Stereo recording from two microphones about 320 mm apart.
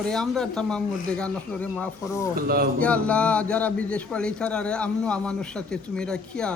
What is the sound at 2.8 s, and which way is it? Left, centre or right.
Speech, centre.